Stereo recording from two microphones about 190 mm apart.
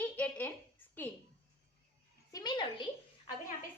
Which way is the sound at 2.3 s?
20° left (ahead or behind).